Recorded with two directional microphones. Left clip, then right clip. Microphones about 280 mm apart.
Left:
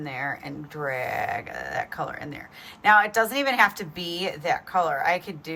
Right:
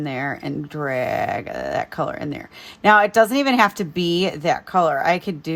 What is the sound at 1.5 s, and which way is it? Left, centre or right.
Speech, right.